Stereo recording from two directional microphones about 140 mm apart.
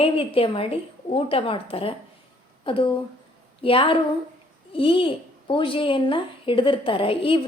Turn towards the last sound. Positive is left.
turn(degrees=40)  # may be behind; listen again after turning